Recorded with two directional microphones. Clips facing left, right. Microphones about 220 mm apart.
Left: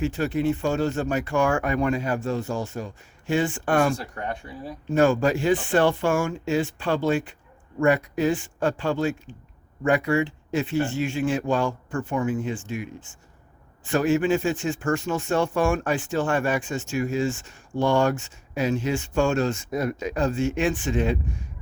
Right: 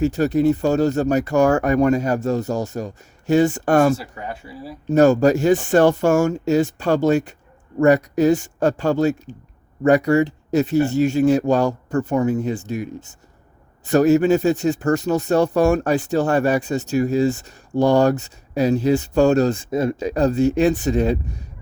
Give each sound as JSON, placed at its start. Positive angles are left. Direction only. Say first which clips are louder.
{"t": 0.0, "sound": "speech", "louder": "right 7 dB", "side_deg": -40}
{"t": 3.9, "sound": "speech", "louder": "right 2 dB", "side_deg": -5}
{"t": 4.9, "sound": "speech", "louder": "right 6 dB", "side_deg": -40}